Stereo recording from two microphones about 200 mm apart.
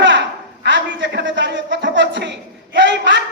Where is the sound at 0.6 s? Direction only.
65° right (ahead or behind).